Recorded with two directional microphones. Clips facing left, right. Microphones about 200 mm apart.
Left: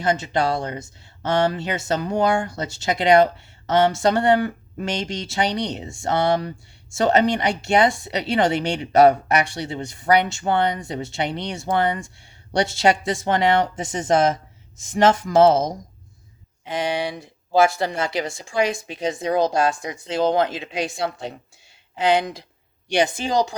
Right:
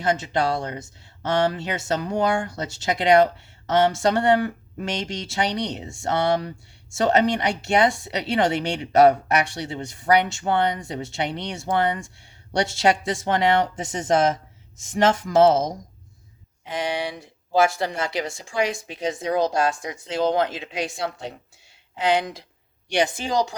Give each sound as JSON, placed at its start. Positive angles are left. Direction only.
{"t": 0.0, "sound": "speech", "side_deg": 25}
{"t": 16.7, "sound": "speech", "side_deg": 30}